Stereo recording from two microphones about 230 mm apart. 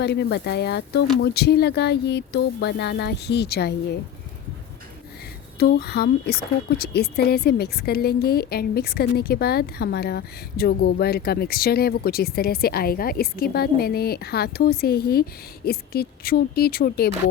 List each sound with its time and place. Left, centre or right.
0.0 s speech: left
5.5 s a woman's voice: left